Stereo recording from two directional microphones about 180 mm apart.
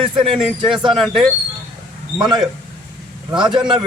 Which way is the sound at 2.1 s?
25° right (ahead or behind).